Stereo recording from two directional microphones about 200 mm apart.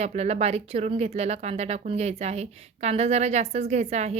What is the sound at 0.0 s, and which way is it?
A woman's voice, 35° right (ahead or behind).